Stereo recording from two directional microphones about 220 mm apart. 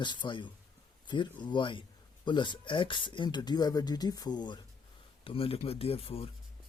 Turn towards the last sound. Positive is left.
turn(degrees=25)  # may be behind; listen again after turning